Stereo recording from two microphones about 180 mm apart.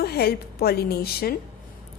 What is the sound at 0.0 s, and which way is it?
A woman's voice, 60° left (ahead or behind).